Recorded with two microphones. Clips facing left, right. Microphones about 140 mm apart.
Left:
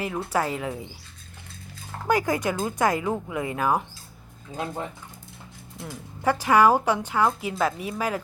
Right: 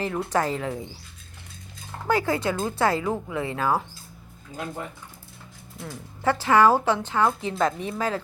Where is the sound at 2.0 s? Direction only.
15° left (ahead or behind).